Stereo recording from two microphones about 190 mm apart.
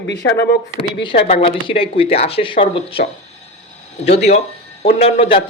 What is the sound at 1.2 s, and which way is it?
Speech, 30° left (ahead or behind).